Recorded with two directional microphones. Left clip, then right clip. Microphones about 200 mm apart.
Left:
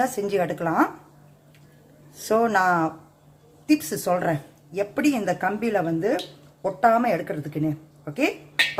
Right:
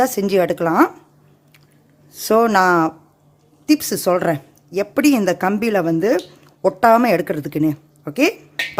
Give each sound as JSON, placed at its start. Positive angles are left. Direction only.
{"t": 0.0, "sound": "speech", "side_deg": -50}
{"t": 2.1, "sound": "a woman's voice", "side_deg": -55}